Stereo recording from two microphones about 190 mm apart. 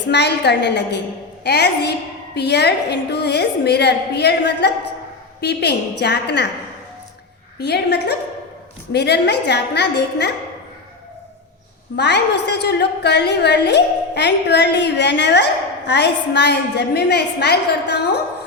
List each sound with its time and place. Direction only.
0.1 s a woman's voice: 60° left (ahead or behind)
7.6 s a woman's voice: 65° left (ahead or behind)
11.9 s a woman's voice: 65° left (ahead or behind)